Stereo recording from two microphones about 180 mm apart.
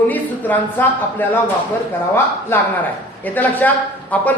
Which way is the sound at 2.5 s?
10° left (ahead or behind).